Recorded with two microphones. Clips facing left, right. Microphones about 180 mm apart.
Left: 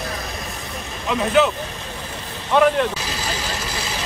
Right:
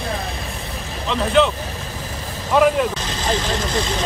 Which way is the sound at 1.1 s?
5° left (ahead or behind).